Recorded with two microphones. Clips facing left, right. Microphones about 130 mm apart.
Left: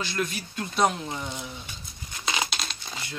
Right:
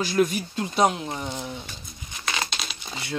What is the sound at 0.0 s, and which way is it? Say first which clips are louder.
Speech: right 8 dB; 45° right (ahead or behind).